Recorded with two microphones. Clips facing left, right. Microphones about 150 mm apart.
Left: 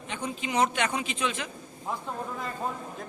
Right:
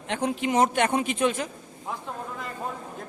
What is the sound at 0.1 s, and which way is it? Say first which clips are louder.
Speech: right 7 dB; 70° right (ahead or behind).